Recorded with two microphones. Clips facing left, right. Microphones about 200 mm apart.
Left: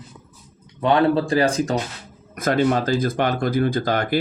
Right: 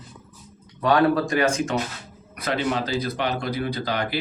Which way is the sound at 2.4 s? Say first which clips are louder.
Left 6 dB; 45° left (ahead or behind).